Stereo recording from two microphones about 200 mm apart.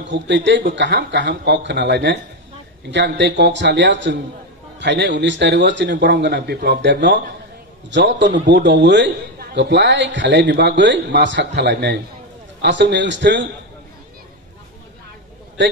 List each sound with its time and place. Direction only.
0.0 s a man's voice: 65° right (ahead or behind)